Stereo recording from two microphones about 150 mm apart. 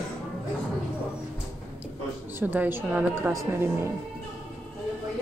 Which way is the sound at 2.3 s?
15° right (ahead or behind).